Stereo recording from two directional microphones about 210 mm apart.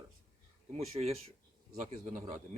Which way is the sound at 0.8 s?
30° right (ahead or behind).